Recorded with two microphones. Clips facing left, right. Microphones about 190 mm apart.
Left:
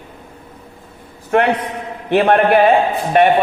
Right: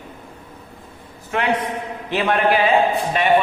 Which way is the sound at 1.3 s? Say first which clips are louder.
Left 6 dB; 55° left (ahead or behind).